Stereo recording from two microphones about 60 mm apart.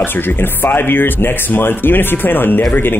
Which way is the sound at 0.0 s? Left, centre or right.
Left.